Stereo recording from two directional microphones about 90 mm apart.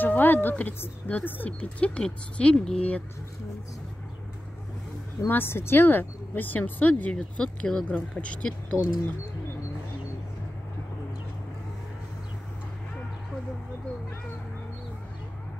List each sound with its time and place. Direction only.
0.0 s speech: 20° left (ahead or behind)
5.3 s speech: 25° left (ahead or behind)